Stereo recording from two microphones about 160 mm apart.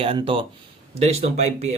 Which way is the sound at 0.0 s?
35° right (ahead or behind).